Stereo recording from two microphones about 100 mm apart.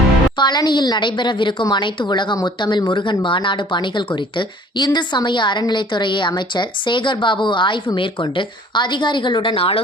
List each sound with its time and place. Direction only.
0.3 s a woman's voice: 45° left (ahead or behind); by 9.8 s 70° left (ahead or behind)